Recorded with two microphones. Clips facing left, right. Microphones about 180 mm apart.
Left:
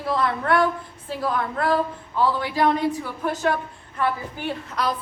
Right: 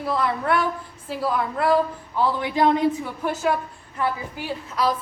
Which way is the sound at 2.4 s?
20° right (ahead or behind).